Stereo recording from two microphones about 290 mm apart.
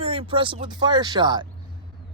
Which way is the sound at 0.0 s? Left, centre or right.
Centre.